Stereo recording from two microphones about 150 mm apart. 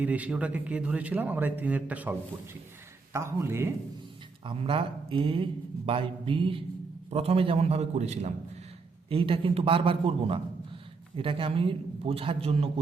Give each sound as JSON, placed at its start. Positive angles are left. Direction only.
{"t": 0.0, "sound": "a man's voice", "side_deg": -10}
{"t": 4.4, "sound": "a man's voice", "side_deg": -35}
{"t": 9.0, "sound": "speech", "side_deg": -40}